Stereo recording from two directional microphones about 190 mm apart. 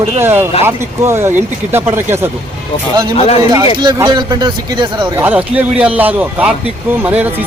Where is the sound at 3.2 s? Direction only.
35° left (ahead or behind).